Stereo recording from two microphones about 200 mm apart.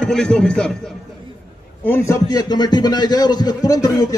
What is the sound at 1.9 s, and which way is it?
A man's voice, 15° left (ahead or behind).